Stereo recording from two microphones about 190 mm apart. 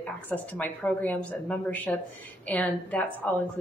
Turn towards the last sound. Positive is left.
turn(degrees=5)  # may be behind; listen again after turning